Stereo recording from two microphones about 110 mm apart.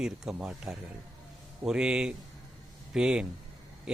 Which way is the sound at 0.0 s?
5° right (ahead or behind).